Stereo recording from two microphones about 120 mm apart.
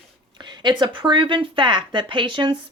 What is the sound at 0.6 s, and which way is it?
A woman's voice, 40° right (ahead or behind).